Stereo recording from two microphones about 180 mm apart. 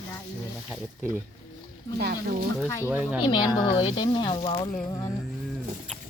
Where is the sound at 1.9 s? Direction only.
55° right (ahead or behind).